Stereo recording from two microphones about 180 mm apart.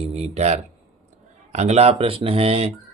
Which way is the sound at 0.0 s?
40° right (ahead or behind).